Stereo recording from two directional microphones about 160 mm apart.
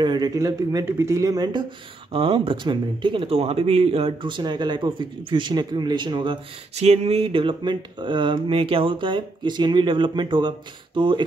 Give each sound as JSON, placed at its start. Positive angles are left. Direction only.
{"t": 0.0, "sound": "speech", "side_deg": -25}
{"t": 2.1, "sound": "speech", "side_deg": -35}
{"t": 6.7, "sound": "speech", "side_deg": -40}